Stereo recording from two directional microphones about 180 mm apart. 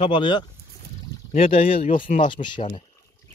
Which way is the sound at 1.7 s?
50° left (ahead or behind).